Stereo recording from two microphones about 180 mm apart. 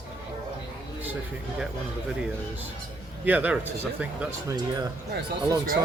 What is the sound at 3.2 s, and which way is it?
Speech, 10° right (ahead or behind).